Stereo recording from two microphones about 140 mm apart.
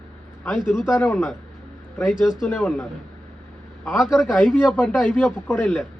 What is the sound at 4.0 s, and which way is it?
A man's voice, centre (ahead or behind).